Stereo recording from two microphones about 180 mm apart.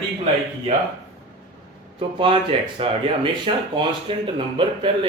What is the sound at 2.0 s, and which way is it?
Speech, 30° right (ahead or behind).